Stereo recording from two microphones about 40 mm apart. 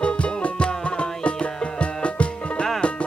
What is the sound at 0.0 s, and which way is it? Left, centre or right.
Music, left.